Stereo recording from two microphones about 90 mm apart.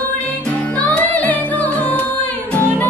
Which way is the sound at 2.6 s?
20° left (ahead or behind).